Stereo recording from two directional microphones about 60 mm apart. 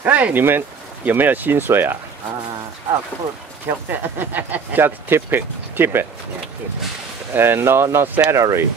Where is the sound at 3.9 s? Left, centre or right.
Right.